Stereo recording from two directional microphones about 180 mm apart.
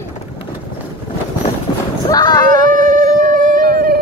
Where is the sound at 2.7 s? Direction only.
45° right (ahead or behind).